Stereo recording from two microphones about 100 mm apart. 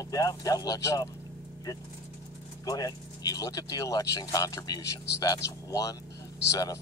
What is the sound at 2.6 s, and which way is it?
Speech, 40° left (ahead or behind).